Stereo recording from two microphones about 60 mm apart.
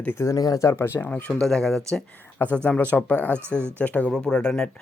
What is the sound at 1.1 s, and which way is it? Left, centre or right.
Speech, centre.